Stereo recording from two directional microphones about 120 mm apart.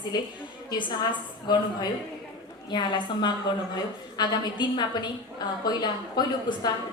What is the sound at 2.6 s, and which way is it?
A woman's voice, 40° left (ahead or behind).